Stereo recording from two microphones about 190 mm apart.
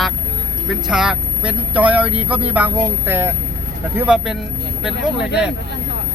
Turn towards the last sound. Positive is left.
turn(degrees=-5)  # may be behind; listen again after turning